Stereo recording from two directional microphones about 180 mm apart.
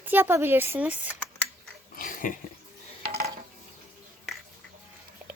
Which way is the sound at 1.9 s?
50° left (ahead or behind).